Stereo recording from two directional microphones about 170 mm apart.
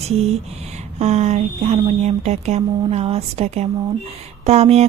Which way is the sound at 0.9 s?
40° right (ahead or behind).